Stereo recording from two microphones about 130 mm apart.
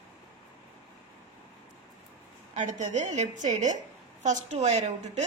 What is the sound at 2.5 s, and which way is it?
A woman's voice, 70° right (ahead or behind).